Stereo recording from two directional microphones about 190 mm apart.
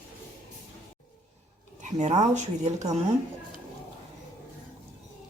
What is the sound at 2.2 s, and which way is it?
Speech, 40° right (ahead or behind).